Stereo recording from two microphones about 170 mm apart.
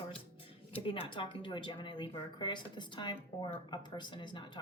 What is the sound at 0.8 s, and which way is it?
Speech, 30° left (ahead or behind).